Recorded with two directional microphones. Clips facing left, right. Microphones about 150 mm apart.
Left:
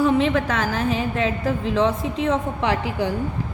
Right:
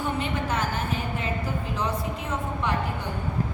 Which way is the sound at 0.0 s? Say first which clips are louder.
Left 10 dB; 90° left.